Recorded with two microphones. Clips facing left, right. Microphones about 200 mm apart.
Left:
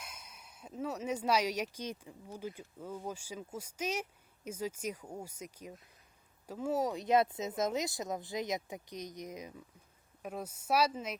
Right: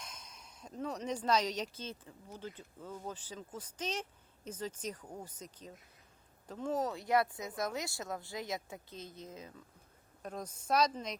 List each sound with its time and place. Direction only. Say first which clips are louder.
0.0 s speech: even; 10° left (ahead or behind)